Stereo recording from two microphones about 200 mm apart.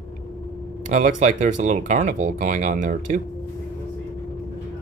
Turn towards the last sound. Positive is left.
turn(degrees=-40)  # may be behind; listen again after turning